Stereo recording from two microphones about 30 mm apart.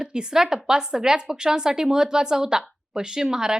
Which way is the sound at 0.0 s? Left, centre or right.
Right.